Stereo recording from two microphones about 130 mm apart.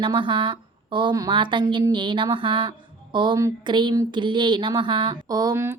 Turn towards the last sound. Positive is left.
turn(degrees=-25)  # may be behind; listen again after turning